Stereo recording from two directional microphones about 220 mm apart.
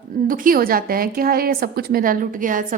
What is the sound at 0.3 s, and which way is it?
A woman's voice, 40° right (ahead or behind).